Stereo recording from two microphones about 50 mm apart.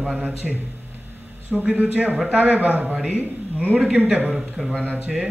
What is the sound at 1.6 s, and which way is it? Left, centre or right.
A man's voice, right.